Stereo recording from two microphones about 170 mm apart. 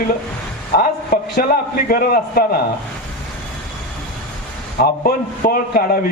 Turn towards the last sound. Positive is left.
turn(degrees=60)  # may be behind; listen again after turning